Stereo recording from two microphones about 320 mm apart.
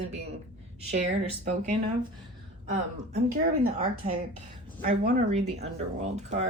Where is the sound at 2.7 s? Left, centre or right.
Right.